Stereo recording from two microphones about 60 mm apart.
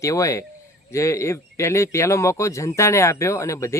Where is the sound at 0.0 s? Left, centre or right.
Left.